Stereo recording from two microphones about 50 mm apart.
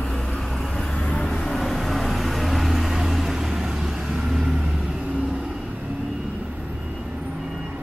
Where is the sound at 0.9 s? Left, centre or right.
Centre.